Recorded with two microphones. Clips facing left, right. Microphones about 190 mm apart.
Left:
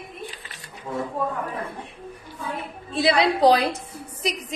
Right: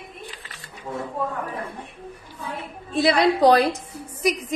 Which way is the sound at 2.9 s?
50° right (ahead or behind).